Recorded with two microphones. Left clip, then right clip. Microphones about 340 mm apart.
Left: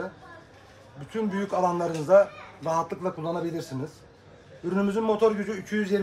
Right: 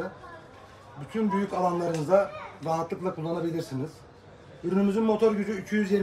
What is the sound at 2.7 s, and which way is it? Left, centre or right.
Speech, centre.